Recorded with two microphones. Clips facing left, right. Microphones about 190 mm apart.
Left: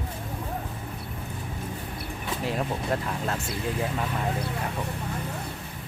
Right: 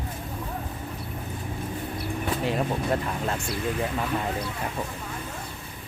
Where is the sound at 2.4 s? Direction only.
Centre (ahead or behind).